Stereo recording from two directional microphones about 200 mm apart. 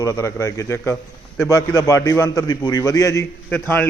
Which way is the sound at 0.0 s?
15° left (ahead or behind).